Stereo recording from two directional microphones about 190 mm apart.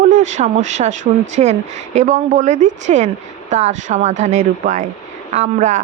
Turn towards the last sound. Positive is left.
turn(degrees=-40)  # may be behind; listen again after turning